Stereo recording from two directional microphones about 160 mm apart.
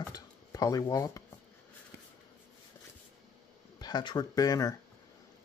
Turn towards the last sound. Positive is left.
turn(degrees=25)  # may be behind; listen again after turning